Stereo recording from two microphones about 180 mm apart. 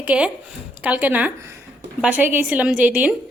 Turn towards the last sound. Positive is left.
turn(degrees=-5)  # may be behind; listen again after turning